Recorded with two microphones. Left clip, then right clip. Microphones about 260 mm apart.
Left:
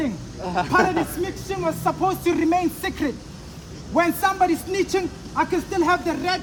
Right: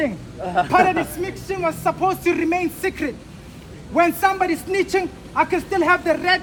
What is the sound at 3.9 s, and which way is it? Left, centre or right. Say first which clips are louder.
A man's voice: right 3 dB; centre.